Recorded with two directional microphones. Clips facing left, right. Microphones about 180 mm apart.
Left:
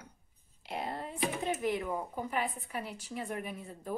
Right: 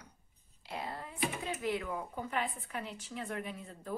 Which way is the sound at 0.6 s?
20° left (ahead or behind).